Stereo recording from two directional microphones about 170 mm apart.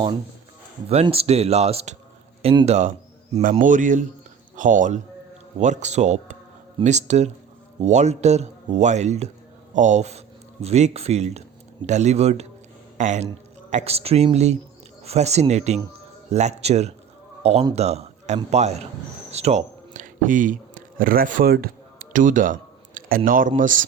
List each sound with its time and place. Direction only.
0.9 s a man's voice: 35° right (ahead or behind)
19.3 s a sound: 40° right (ahead or behind)
23.6 s speech: 50° right (ahead or behind)